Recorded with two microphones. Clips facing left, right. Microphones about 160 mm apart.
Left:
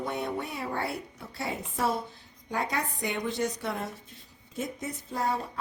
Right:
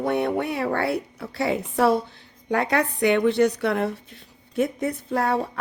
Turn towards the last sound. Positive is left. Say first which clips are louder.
# right 7 dB
turn(degrees=-65)  # may be behind; listen again after turning